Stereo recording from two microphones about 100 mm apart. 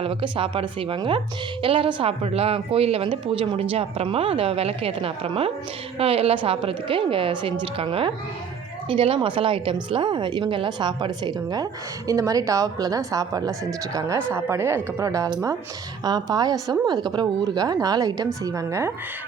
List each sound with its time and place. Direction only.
0.0 s a woman's voice: 65° right (ahead or behind); by 18.9 s 30° right (ahead or behind)